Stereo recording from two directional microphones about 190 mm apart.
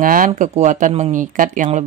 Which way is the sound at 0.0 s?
45° right (ahead or behind).